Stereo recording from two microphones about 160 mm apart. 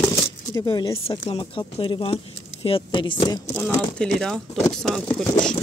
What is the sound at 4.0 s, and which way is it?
Speech, 5° left (ahead or behind).